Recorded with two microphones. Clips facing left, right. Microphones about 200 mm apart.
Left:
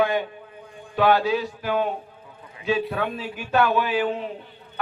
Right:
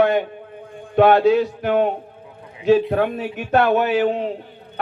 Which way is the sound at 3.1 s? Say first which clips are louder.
Right 4 dB; 65° right (ahead or behind).